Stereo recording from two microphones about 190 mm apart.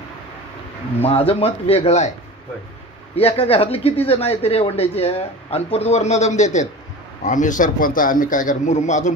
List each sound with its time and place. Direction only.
1.0 s speech: 30° left (ahead or behind)
3.2 s a man's voice: 30° left (ahead or behind)